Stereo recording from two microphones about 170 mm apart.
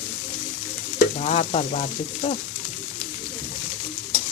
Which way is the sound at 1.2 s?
40° left (ahead or behind).